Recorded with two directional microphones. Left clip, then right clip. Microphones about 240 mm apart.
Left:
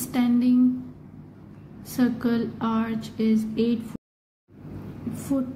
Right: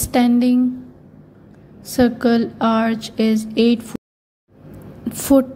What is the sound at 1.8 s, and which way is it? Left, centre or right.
Speech, right.